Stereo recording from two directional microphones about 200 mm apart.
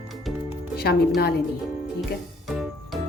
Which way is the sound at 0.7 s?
50° left (ahead or behind).